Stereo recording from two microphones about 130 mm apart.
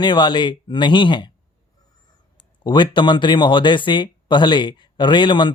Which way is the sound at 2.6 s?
35° left (ahead or behind).